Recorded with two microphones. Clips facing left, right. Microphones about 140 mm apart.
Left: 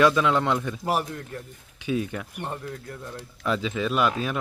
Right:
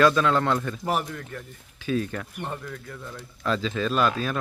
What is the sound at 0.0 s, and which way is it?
Speech, 15° left (ahead or behind).